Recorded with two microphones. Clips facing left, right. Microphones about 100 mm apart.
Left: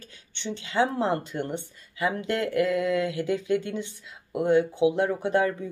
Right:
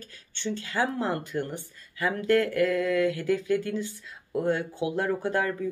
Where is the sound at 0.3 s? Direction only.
20° left (ahead or behind).